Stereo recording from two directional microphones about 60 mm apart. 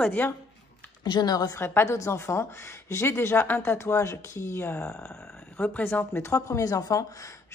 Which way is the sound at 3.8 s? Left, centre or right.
Left.